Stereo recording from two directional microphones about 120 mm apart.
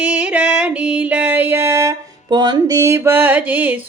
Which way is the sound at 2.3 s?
35° right (ahead or behind).